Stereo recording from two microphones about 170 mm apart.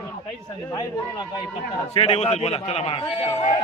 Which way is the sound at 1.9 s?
35° left (ahead or behind).